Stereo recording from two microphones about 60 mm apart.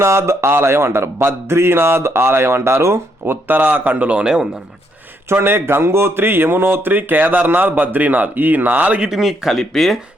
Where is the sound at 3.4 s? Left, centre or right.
Right; by 4.6 s centre.